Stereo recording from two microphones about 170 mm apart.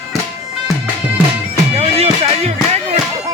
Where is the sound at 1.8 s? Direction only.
35° right (ahead or behind).